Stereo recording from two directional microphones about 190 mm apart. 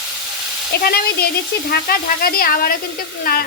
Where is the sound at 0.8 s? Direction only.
55° left (ahead or behind).